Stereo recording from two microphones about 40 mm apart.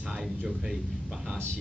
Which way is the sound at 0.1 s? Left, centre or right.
Centre.